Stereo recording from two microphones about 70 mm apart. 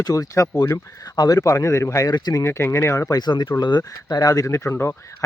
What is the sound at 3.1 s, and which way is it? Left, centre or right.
Speech, left.